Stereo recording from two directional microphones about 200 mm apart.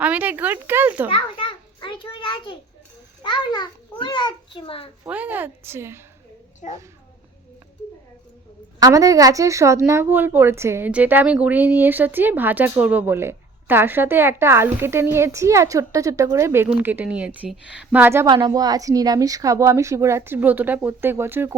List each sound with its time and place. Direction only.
0.0 s speech: 10° right (ahead or behind)
1.1 s a sound: 25° left (ahead or behind)
3.2 s a child's voice: 20° left (ahead or behind)
5.0 s speech: 10° right (ahead or behind)
8.8 s speech: 15° right (ahead or behind)